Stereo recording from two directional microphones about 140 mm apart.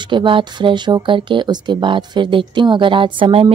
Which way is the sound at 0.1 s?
35° right (ahead or behind).